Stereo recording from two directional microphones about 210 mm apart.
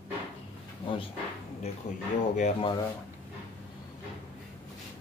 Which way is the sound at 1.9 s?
35° left (ahead or behind).